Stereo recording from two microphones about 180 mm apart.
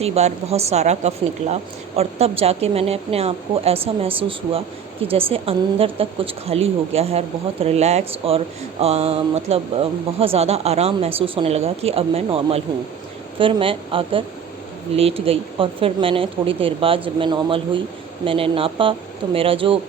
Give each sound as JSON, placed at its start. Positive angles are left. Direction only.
{"t": 0.0, "sound": "a woman's voice", "side_deg": -35}